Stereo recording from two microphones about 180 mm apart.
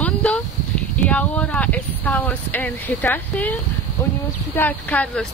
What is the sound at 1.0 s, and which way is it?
Speech, 5° left (ahead or behind).